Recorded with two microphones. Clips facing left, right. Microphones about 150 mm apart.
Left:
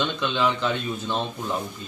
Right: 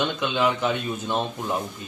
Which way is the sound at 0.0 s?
15° right (ahead or behind).